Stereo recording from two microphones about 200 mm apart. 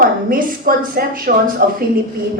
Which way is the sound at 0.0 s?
45° right (ahead or behind).